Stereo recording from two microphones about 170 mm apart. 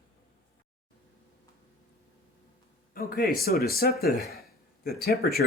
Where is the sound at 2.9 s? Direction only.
60° left (ahead or behind).